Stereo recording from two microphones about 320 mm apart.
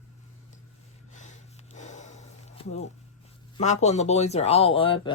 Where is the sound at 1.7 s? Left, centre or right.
Left.